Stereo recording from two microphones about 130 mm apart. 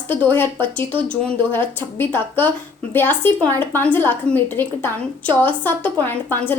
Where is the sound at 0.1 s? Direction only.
15° left (ahead or behind).